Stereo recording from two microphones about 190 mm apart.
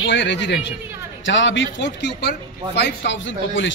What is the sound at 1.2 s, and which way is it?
A man's voice, 80° left.